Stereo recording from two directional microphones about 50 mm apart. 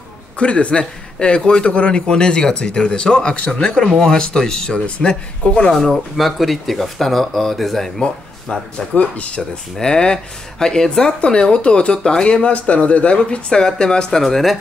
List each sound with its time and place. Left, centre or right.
0.4 s a man's voice: left
5.8 s speech: centre
8.0 s a man's voice: centre
9.8 s a man's voice: centre
14.2 s speech: centre